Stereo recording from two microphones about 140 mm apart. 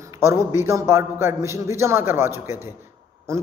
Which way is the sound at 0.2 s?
20° right (ahead or behind).